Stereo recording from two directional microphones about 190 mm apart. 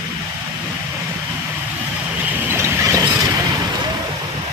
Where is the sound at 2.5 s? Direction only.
15° right (ahead or behind).